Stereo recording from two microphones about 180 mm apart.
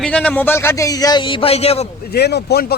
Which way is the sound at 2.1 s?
65° left (ahead or behind).